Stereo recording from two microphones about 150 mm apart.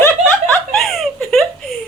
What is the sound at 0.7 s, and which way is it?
Giggle, centre (ahead or behind).